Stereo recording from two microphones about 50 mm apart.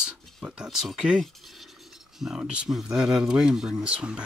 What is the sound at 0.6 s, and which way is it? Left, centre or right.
Speech, centre.